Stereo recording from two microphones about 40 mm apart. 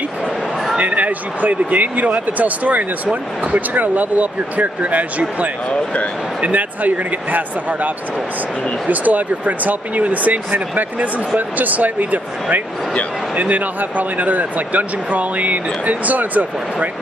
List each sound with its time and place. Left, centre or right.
0.7 s speech: right
6.4 s speech: right